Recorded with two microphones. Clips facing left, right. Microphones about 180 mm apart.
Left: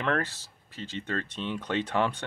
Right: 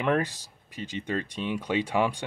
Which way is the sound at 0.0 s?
15° right (ahead or behind).